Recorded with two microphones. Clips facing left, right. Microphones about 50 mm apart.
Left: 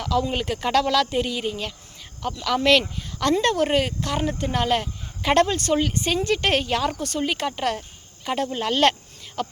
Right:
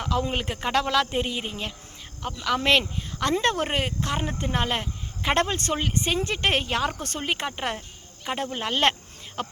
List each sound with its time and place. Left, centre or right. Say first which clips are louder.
0.0 s speech: left 3 dB; right
7.0 s speech: left 4 dB; right
7.8 s cricket: left 2 dB; centre